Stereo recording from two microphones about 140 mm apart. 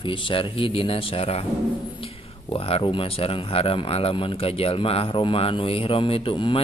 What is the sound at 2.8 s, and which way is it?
Speech, 40° left (ahead or behind).